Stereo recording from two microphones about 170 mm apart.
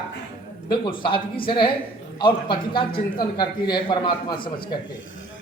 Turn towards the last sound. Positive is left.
turn(degrees=30)  # may be behind; listen again after turning